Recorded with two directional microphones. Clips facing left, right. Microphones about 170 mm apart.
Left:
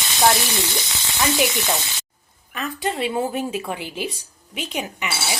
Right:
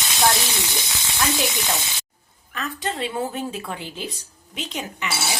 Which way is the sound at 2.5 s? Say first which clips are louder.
Left 3 dB; 10° left (ahead or behind).